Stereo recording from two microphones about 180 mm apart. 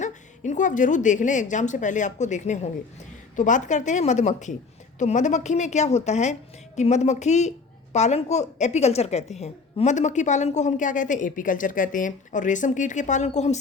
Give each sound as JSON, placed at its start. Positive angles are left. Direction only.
{"t": 0.0, "sound": "a woman's voice", "side_deg": 40}